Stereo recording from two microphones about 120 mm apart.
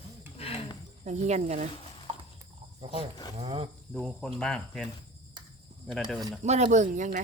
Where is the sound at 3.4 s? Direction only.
55° right (ahead or behind).